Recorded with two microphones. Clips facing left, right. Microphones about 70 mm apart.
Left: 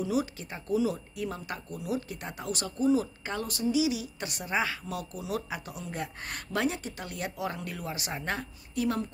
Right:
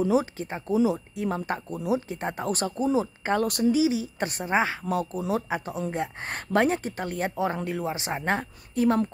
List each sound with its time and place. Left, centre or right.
0.0 s speech: right
2.8 s a woman's voice: right
3.3 s speech: right
3.7 s speech: right